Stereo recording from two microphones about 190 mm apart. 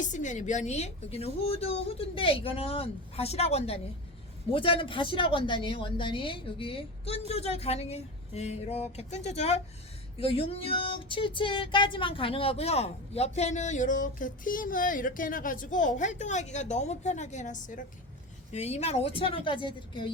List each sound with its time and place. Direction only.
0.0 s a woman's voice: 40° left (ahead or behind); by 20.1 s 25° left (ahead or behind)